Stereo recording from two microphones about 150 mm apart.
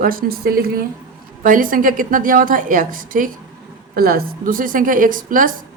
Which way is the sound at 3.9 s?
85° right.